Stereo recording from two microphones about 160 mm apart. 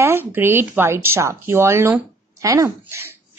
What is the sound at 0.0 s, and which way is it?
A woman's voice, 15° right (ahead or behind).